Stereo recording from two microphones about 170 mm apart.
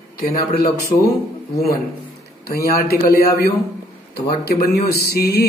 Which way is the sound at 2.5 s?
65° left (ahead or behind).